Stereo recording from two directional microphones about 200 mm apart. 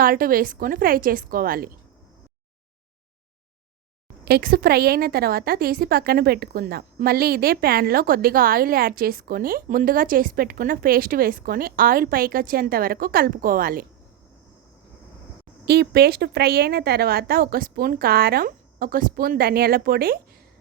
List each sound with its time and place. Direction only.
0.0 s a woman's voice: 45° right (ahead or behind)
4.3 s a woman's voice: 50° right (ahead or behind)
15.6 s a woman's voice: 55° right (ahead or behind)